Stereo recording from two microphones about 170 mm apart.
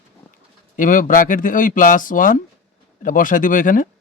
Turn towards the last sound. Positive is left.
turn(degrees=50)  # may be behind; listen again after turning